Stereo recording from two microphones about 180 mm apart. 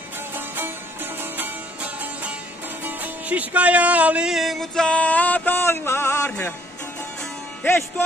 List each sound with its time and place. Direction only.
0.3 s music: 10° right (ahead or behind); by 6.5 s 10° left (ahead or behind)